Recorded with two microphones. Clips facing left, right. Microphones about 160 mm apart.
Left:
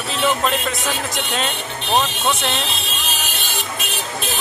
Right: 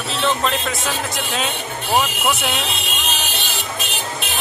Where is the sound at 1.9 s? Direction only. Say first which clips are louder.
Even; 25° left (ahead or behind).